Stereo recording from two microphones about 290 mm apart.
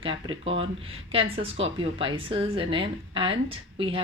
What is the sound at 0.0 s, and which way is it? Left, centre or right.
Speech, centre.